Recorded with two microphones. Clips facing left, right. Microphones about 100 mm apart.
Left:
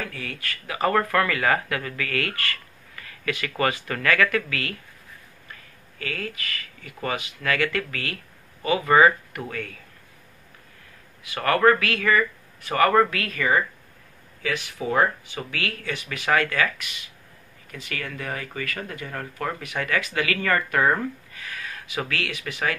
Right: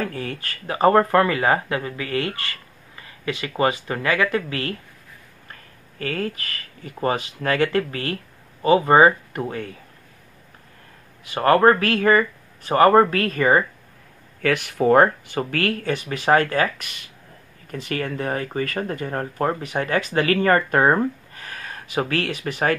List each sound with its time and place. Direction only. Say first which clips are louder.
0.0 s speech: right 6 dB; 40° right (ahead or behind)
11.2 s speech: right 4 dB; 35° right (ahead or behind)
14.4 s speech: right 8 dB; 55° right (ahead or behind)